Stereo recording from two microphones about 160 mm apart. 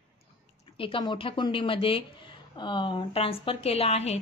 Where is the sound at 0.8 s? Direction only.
30° left (ahead or behind).